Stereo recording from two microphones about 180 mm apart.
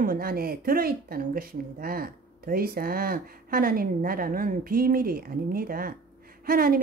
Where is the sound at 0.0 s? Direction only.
55° right (ahead or behind).